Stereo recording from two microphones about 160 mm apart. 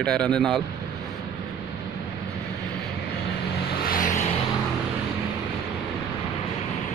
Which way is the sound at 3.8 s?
60° left (ahead or behind).